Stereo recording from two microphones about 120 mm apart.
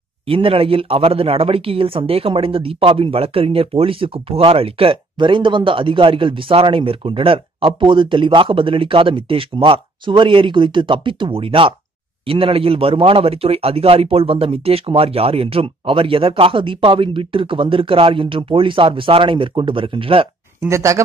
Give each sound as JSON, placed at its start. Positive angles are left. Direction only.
{"t": 0.3, "sound": "speech", "side_deg": -50}
{"t": 20.6, "sound": "speech", "side_deg": -25}